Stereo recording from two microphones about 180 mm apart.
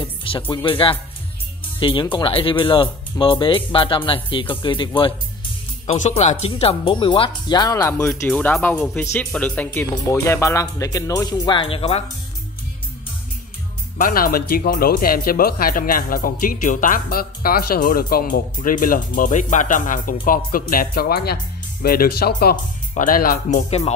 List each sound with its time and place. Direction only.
0.0 s music: 30° left (ahead or behind)
0.5 s speech: 25° left (ahead or behind)
5.9 s speech: 40° left (ahead or behind)
13.9 s speech: 50° left (ahead or behind)